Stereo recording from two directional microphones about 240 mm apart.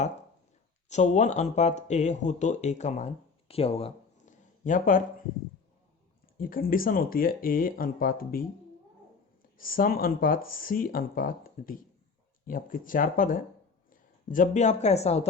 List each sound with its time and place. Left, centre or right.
0.9 s speech: left
3.5 s a sound: left
6.3 s speech: left
9.6 s speech: left